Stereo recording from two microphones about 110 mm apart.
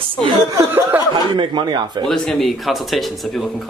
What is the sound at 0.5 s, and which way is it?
Speech, 20° right (ahead or behind).